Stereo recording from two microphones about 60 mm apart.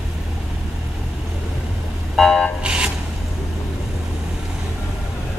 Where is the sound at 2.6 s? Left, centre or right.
Centre.